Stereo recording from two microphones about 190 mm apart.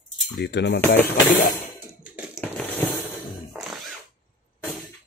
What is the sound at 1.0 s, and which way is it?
Speech, 10° left (ahead or behind).